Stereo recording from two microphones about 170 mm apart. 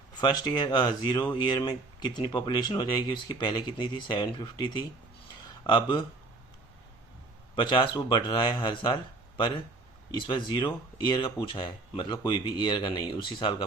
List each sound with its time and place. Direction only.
0.2 s speech: 25° left (ahead or behind)
5.6 s speech: 30° left (ahead or behind)
7.5 s speech: 30° left (ahead or behind)
10.1 s speech: 25° left (ahead or behind)